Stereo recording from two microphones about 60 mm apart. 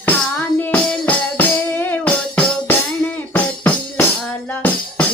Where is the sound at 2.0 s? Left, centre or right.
Left.